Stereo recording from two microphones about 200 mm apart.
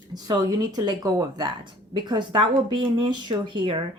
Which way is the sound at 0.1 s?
20° right (ahead or behind).